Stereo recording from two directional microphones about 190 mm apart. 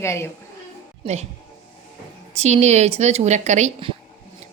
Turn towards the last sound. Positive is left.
turn(degrees=-35)  # may be behind; listen again after turning